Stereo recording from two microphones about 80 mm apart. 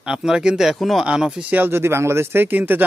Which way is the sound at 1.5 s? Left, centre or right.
Right.